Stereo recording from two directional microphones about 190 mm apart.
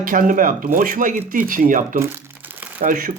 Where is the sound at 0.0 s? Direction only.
45° right (ahead or behind).